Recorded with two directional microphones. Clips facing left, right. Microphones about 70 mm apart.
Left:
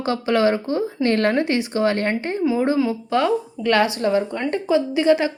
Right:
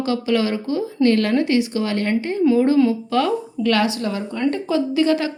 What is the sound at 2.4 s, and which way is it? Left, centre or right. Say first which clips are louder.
A woman's voice: right 5 dB; centre.